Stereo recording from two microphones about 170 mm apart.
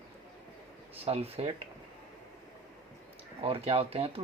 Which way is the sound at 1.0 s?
35° right (ahead or behind).